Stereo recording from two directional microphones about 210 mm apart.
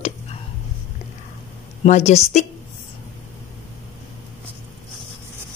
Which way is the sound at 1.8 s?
30° left (ahead or behind).